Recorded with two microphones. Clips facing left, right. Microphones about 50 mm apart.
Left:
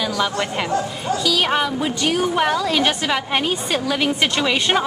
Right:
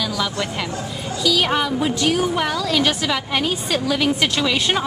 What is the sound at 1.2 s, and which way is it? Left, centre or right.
Speech, centre.